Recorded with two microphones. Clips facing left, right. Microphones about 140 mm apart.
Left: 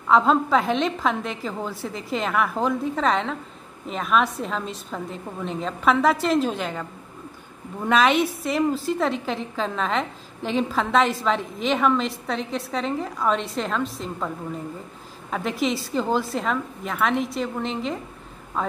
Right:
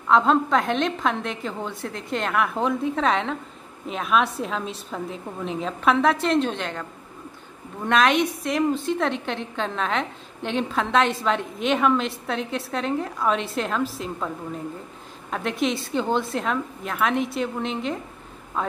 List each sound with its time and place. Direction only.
0.0 s a woman's voice: centre (ahead or behind)
15.3 s a woman's voice: centre (ahead or behind)